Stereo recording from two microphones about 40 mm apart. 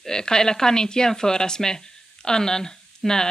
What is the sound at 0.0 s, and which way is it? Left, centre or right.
A woman's voice, centre.